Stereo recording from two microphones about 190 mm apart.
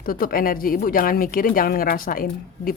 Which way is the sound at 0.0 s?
50° left (ahead or behind).